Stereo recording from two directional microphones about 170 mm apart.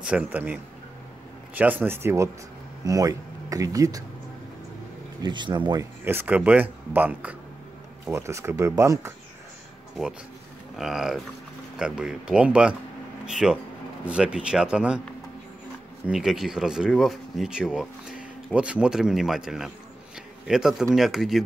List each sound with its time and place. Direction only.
0.0 s speech: 10° right (ahead or behind)
5.2 s speech: 25° right (ahead or behind)
6.0 s speech: 10° right (ahead or behind)
10.8 s speech: 5° right (ahead or behind)
16.1 s speech: centre (ahead or behind)